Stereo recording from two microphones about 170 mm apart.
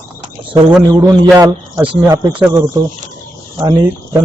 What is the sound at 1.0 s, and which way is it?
Speech, 20° right (ahead or behind).